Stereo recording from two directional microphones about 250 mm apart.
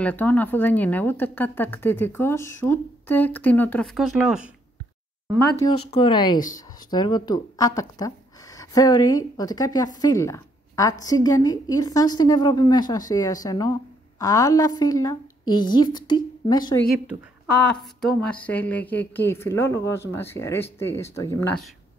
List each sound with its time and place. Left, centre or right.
0.0 s a woman's voice: centre
5.6 s a woman's voice: centre
17.6 s a woman's voice: centre